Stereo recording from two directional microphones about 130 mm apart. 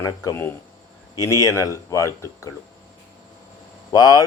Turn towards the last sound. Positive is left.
turn(degrees=30)  # may be behind; listen again after turning